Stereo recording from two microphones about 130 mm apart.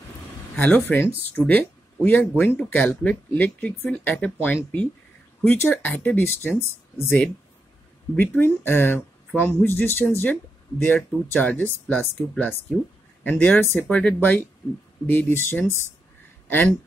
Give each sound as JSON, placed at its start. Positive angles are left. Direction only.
{"t": 0.6, "sound": "speech", "side_deg": 10}